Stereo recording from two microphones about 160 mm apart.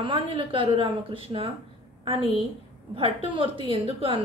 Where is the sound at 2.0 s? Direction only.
35° right (ahead or behind).